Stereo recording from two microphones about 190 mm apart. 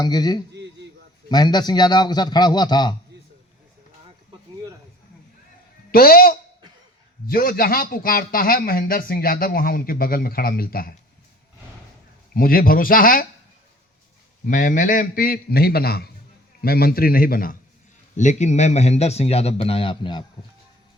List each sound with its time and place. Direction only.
0.0 s a man's voice: 20° left (ahead or behind)
5.9 s a man's voice: 50° left (ahead or behind)
12.3 s a man's voice: 50° left (ahead or behind)
14.4 s a man's voice: 45° left (ahead or behind)
18.2 s a man's voice: 40° left (ahead or behind)